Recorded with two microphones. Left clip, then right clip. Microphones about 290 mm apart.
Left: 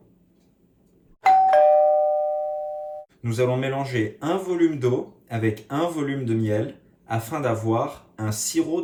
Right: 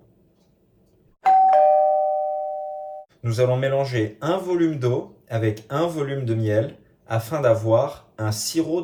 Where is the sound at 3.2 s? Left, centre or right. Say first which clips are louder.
Right 3 dB; centre.